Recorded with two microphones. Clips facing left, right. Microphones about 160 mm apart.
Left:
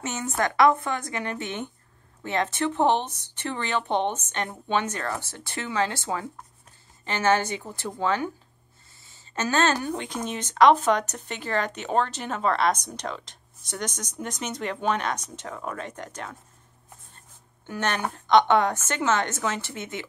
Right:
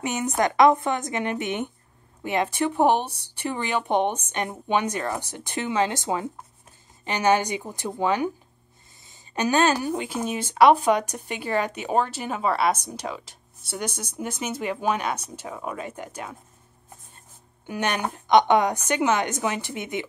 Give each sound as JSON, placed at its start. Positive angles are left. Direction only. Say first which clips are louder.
{"t": 0.0, "sound": "a woman's voice", "louder": "right 3 dB", "side_deg": -15}
{"t": 17.6, "sound": "speech", "louder": "right 1 dB", "side_deg": -15}